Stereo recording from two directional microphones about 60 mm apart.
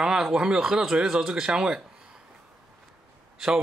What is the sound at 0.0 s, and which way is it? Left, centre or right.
Speech, centre.